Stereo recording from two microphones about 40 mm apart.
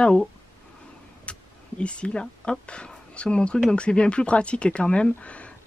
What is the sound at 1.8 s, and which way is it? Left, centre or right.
Speech, left.